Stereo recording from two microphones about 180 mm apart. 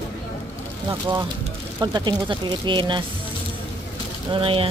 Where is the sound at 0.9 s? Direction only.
25° right (ahead or behind).